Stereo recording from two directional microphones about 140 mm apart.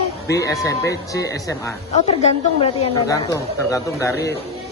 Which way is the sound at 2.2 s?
50° left (ahead or behind).